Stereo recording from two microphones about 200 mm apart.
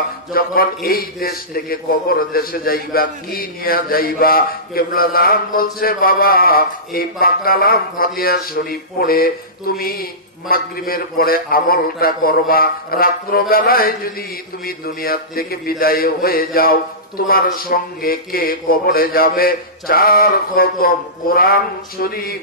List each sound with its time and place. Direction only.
0.3 s a man's voice: 50° left (ahead or behind)